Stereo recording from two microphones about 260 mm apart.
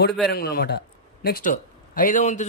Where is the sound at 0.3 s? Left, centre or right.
Left.